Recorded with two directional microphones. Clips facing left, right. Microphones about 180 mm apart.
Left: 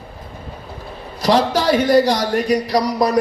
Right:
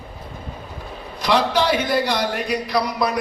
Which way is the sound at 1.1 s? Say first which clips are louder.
Left 3 dB; 40° left (ahead or behind).